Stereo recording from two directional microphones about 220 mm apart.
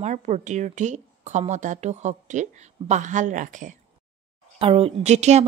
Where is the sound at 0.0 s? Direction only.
35° right (ahead or behind).